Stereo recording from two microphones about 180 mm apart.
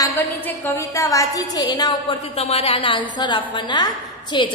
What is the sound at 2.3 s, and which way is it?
A woman's voice, 35° left (ahead or behind).